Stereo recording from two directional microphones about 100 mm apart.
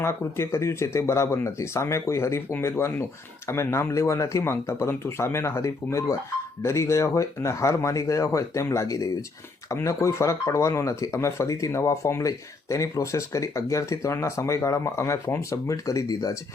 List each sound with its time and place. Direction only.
0.0 s speech: 25° left (ahead or behind)